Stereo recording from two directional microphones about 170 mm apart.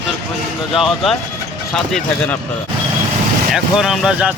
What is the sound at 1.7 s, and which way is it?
Speech, 5° left (ahead or behind).